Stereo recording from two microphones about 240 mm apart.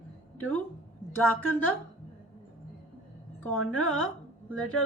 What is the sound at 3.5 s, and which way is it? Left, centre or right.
Speech, left.